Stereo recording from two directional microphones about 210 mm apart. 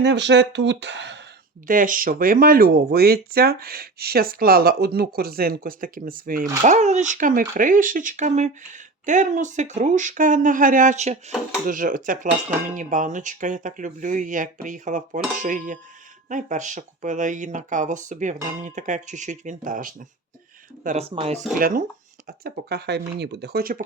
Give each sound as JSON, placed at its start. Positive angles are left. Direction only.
{"t": 0.0, "sound": "speech", "side_deg": -55}
{"t": 1.6, "sound": "speech", "side_deg": -40}
{"t": 21.6, "sound": "speech", "side_deg": -40}